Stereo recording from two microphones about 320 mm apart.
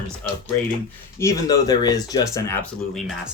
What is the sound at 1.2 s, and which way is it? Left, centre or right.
Speech, centre.